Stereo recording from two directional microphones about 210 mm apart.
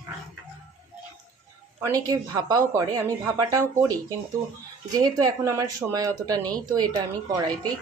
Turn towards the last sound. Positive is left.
turn(degrees=-20)  # may be behind; listen again after turning